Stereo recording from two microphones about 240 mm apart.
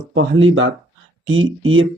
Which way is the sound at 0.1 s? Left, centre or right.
Right.